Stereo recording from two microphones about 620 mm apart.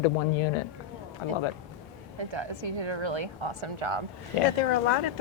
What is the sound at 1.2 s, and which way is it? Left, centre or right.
Speech, left.